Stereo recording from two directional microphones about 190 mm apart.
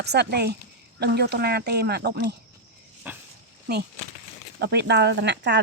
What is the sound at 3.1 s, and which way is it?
Pig, 10° right (ahead or behind).